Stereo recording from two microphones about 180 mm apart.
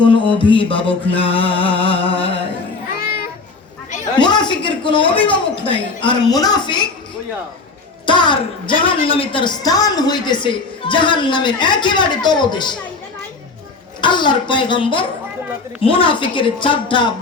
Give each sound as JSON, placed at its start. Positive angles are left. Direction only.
{"t": 0.0, "sound": "a woman's voice", "side_deg": 30}
{"t": 0.9, "sound": "music", "side_deg": 30}
{"t": 4.2, "sound": "a sound", "side_deg": 25}
{"t": 6.1, "sound": "a woman's voice", "side_deg": 20}
{"t": 8.0, "sound": "a woman's voice", "side_deg": 25}
{"t": 14.0, "sound": "a woman's voice", "side_deg": 25}